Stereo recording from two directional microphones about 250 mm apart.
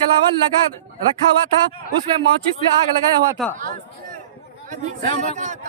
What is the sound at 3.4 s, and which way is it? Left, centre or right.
Speech, centre.